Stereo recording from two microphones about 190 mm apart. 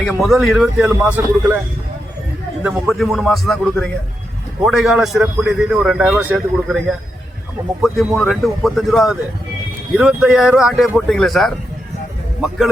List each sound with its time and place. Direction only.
0.0 s a man's voice: centre (ahead or behind)
2.8 s a man's voice: centre (ahead or behind)